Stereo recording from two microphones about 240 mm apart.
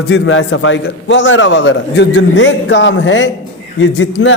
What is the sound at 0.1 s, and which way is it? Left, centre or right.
A man's voice, left.